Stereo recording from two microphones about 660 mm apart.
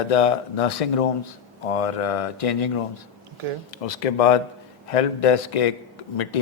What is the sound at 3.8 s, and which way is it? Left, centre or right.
Speech, left.